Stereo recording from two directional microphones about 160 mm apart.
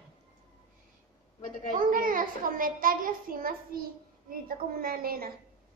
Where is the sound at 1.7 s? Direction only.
55° right (ahead or behind).